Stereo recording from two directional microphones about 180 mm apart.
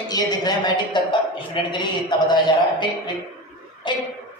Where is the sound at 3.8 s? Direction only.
25° left (ahead or behind).